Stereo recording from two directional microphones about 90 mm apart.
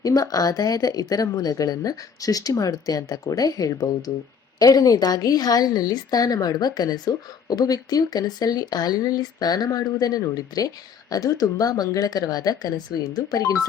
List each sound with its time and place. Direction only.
0.0 s a woman's voice: 40° left (ahead or behind)